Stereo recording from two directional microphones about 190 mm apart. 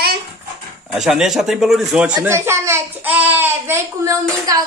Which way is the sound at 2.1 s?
15° right (ahead or behind).